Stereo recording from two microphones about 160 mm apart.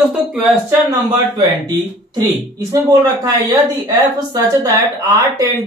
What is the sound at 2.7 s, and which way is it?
Speech, 20° right (ahead or behind).